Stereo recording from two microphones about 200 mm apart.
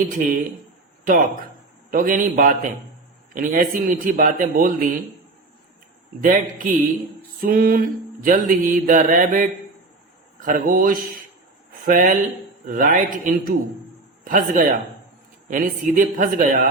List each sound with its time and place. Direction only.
1.0 s speech: 40° right (ahead or behind)
3.3 s mantra: 45° right (ahead or behind)
6.2 s speech: 40° right (ahead or behind)
7.4 s mantra: 45° right (ahead or behind)
11.9 s speech: 40° right (ahead or behind)
12.6 s mantra: 40° right (ahead or behind)
15.4 s speech: 40° right (ahead or behind)